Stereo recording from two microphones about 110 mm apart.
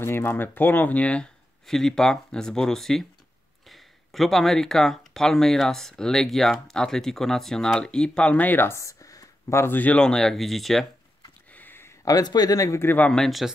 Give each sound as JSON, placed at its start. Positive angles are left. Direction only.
{"t": 0.0, "sound": "speech", "side_deg": 20}
{"t": 11.5, "sound": "a sound", "side_deg": 20}
{"t": 12.0, "sound": "speech", "side_deg": 35}